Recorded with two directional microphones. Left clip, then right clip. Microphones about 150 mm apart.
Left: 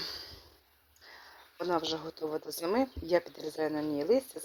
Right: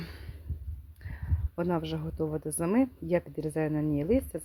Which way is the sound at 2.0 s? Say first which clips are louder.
Right 2 dB; 15° right (ahead or behind).